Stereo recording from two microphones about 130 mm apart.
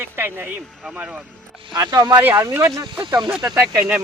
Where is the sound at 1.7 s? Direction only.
30° right (ahead or behind).